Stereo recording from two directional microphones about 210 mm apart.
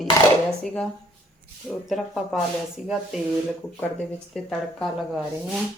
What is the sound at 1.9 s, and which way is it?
Speech, centre (ahead or behind).